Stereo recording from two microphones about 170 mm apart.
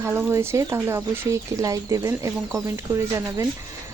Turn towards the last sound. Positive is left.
turn(degrees=-15)  # may be behind; listen again after turning